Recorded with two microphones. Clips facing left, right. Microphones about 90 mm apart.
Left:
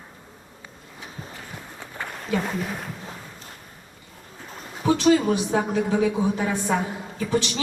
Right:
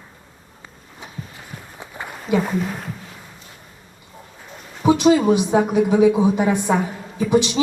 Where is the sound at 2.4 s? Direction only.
Centre (ahead or behind).